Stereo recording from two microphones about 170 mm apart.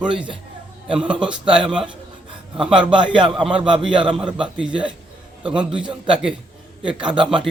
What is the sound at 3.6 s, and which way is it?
Speech, 30° right (ahead or behind).